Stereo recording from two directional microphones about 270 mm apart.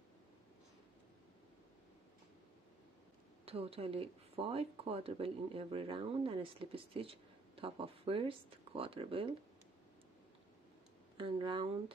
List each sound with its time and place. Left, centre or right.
3.4 s speech: right
11.1 s speech: centre